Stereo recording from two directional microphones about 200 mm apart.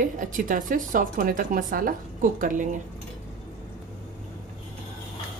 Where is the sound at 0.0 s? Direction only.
40° right (ahead or behind).